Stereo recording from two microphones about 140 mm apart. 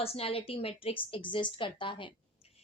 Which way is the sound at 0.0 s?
45° left (ahead or behind).